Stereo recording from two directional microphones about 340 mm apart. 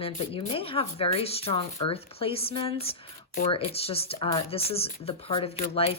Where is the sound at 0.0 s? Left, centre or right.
Centre.